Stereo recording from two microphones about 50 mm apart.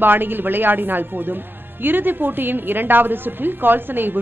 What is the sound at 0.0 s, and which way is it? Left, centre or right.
Speech, right.